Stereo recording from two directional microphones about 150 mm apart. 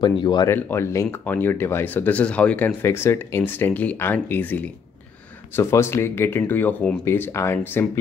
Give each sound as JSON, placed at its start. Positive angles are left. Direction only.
{"t": 0.2, "sound": "speech", "side_deg": 30}
{"t": 0.5, "sound": "speech", "side_deg": 15}